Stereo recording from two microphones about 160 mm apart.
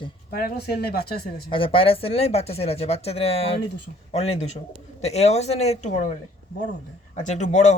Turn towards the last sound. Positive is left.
turn(degrees=45)  # may be behind; listen again after turning